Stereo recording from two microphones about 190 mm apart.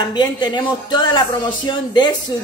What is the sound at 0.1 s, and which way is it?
Speech, 20° left (ahead or behind).